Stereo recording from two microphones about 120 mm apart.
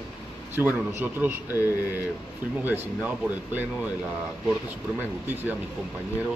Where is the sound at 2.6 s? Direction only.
15° right (ahead or behind).